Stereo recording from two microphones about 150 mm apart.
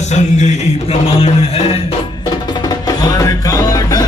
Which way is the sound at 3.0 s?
20° left (ahead or behind).